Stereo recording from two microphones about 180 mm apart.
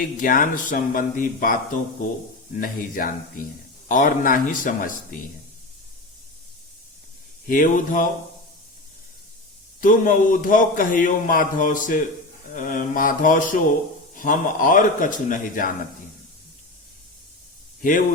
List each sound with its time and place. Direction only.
0.0 s a man's voice: 50° left (ahead or behind)
2.6 s a man's voice: 50° left (ahead or behind)
7.4 s a man's voice: 50° left (ahead or behind)
9.8 s a man's voice: 50° left (ahead or behind)